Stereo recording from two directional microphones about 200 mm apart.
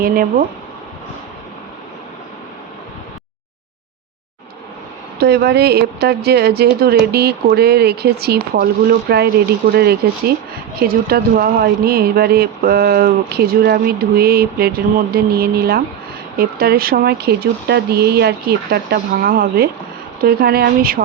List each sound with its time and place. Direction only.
0.0 s speech: 45° right (ahead or behind)
5.2 s speech: 55° right (ahead or behind)